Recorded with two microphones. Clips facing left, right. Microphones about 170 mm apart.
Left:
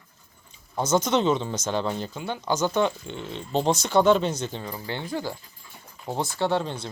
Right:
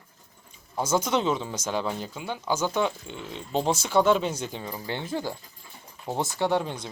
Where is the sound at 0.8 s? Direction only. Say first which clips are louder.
Left 2 dB; 10° right (ahead or behind).